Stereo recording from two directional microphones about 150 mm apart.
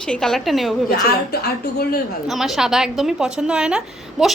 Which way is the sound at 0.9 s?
90° left.